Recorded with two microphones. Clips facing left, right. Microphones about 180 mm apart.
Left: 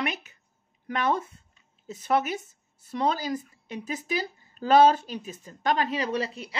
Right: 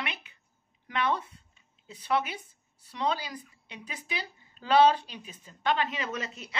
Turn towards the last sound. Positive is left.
turn(degrees=30)  # may be behind; listen again after turning